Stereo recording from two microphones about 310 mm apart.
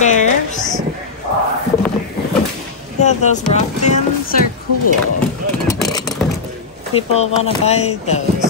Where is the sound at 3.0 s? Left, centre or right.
Left.